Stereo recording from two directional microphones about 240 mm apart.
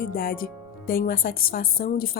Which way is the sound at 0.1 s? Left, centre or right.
Left.